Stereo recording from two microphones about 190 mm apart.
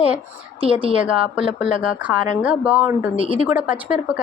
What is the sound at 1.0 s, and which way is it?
Speech, 5° right (ahead or behind).